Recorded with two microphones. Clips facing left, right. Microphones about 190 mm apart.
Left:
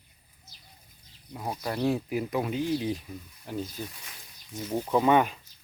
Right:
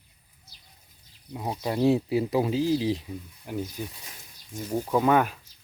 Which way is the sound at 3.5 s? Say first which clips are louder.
Right 2 dB; 15° right (ahead or behind).